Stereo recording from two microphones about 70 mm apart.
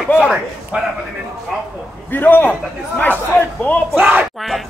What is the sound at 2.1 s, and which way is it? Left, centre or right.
Speech, left.